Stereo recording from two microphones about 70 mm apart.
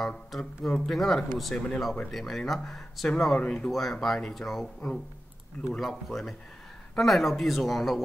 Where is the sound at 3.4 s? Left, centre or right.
Centre.